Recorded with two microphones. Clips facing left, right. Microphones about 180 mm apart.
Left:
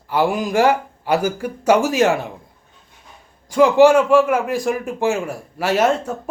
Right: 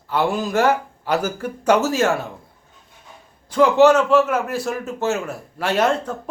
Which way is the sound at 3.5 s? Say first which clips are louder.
Left 2 dB; 10° left (ahead or behind).